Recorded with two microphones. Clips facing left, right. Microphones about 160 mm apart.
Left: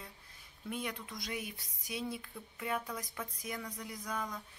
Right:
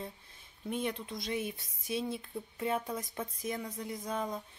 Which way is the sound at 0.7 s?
25° right (ahead or behind).